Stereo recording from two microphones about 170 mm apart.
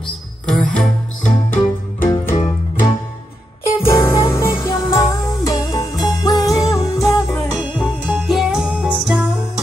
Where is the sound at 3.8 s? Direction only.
15° left (ahead or behind).